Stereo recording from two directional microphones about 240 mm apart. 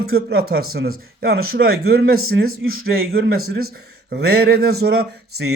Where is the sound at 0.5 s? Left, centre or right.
Right.